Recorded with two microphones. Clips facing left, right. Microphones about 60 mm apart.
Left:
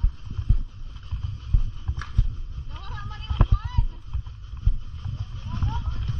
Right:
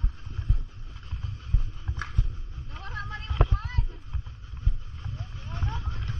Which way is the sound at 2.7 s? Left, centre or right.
Right.